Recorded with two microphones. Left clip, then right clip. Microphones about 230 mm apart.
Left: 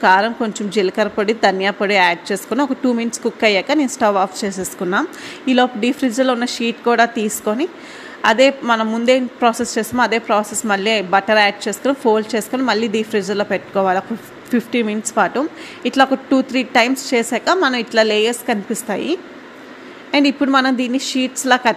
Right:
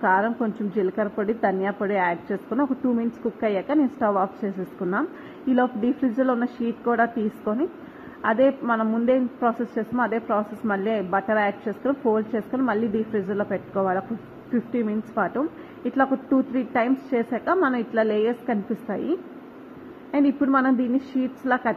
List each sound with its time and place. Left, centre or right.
0.0 s a woman's voice: left
20.1 s a woman's voice: left